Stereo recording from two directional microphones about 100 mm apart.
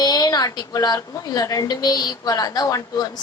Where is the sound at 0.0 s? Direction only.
40° left (ahead or behind).